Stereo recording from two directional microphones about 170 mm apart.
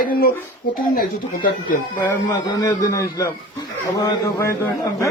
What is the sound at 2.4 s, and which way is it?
A man's voice, 20° left (ahead or behind).